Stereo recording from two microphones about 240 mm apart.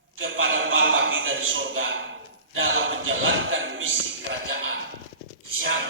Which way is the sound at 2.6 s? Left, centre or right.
Right.